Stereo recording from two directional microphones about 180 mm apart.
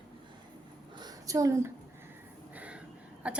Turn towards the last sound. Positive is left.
turn(degrees=-5)  # may be behind; listen again after turning